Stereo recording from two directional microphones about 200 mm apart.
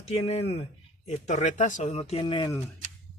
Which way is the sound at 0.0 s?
30° left (ahead or behind).